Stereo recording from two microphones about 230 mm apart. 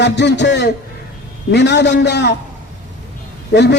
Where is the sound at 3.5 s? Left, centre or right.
Left.